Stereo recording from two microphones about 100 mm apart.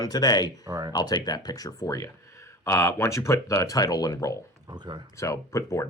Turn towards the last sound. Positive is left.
turn(degrees=30)  # may be behind; listen again after turning